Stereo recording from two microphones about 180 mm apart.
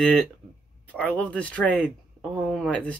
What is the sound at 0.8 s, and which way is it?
Speech, 5° left (ahead or behind).